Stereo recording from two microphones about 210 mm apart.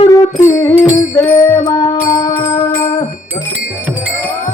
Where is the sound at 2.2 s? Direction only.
30° left (ahead or behind).